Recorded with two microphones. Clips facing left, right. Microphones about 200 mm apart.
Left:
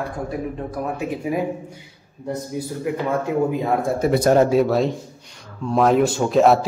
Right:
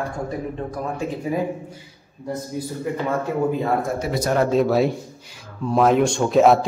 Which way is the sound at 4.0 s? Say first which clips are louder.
Left 6 dB; 55° left (ahead or behind).